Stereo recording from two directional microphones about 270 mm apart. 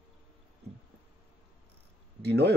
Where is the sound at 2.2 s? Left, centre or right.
Right.